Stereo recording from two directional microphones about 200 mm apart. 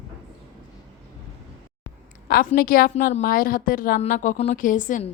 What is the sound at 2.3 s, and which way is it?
A woman's voice, 45° left (ahead or behind).